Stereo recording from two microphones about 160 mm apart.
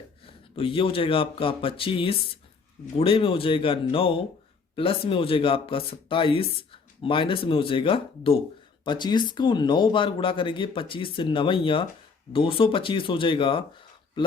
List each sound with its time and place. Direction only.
0.3 s speech: 35° left (ahead or behind)